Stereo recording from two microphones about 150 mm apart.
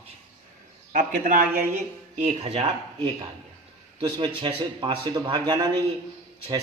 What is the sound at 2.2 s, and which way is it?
Speech, 45° right (ahead or behind).